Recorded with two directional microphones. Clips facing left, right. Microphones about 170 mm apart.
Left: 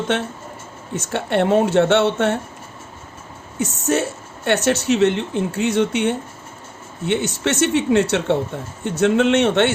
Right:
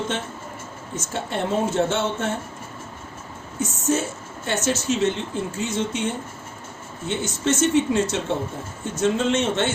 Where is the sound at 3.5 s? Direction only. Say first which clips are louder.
Left 3 dB; 70° left (ahead or behind).